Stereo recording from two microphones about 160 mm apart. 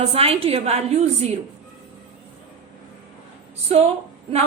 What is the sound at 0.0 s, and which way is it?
A woman's voice, 40° right (ahead or behind).